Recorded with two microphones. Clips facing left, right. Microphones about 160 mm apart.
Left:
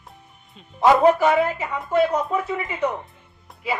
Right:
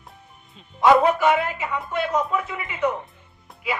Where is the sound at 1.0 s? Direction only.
40° left (ahead or behind).